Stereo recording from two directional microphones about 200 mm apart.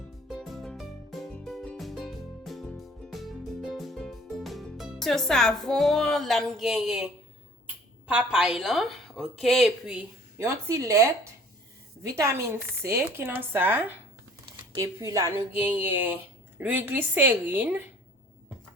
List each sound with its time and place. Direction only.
0.3 s music: centre (ahead or behind)
8.0 s a woman's voice: 5° right (ahead or behind)